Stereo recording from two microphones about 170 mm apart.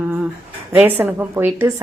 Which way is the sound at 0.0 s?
10° right (ahead or behind).